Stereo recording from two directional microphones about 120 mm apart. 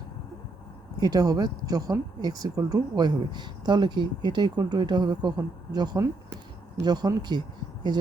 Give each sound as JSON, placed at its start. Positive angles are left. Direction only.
{"t": 0.9, "sound": "speech", "side_deg": -35}